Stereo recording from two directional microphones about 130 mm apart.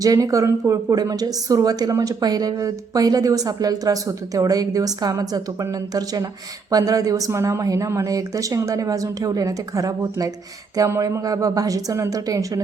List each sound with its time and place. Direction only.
0.0 s speech: 25° right (ahead or behind)